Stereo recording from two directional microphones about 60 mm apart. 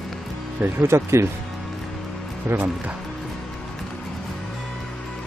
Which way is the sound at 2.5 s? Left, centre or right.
Right.